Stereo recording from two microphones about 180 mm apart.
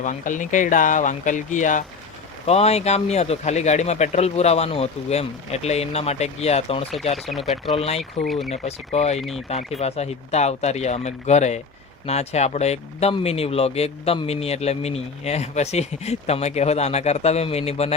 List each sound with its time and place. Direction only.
0.0 s speech: 45° left (ahead or behind)
7.3 s speech: centre (ahead or behind)
7.8 s speech: 35° left (ahead or behind)